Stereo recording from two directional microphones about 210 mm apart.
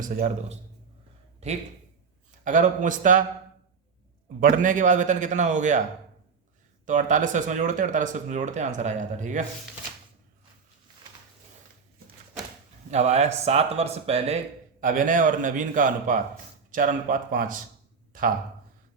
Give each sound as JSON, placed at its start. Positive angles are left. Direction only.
{"t": 0.0, "sound": "speech", "side_deg": -35}
{"t": 4.4, "sound": "speech", "side_deg": -40}
{"t": 6.8, "sound": "speech", "side_deg": -35}
{"t": 12.9, "sound": "speech", "side_deg": -30}
{"t": 14.8, "sound": "speech", "side_deg": -40}